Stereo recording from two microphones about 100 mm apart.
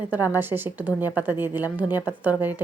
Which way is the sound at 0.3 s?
20° right (ahead or behind).